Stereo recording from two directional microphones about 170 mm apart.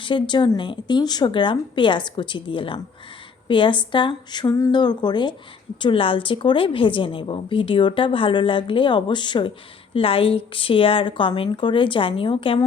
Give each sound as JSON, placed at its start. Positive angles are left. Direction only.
{"t": 0.0, "sound": "a woman's voice", "side_deg": 25}